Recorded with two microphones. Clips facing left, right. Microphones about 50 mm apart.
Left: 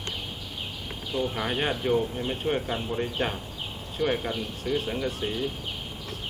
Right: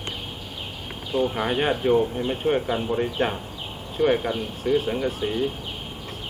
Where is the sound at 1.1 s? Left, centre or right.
Right.